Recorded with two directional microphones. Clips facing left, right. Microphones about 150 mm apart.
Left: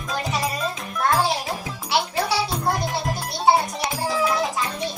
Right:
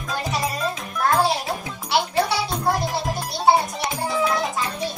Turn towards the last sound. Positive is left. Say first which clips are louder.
# even
turn(degrees=0)  # may be behind; listen again after turning